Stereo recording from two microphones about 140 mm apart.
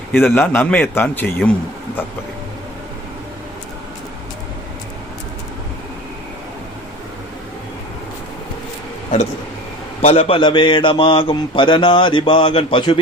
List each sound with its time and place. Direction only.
0.1 s a man's voice: 15° left (ahead or behind)
10.0 s a man's voice: 45° left (ahead or behind)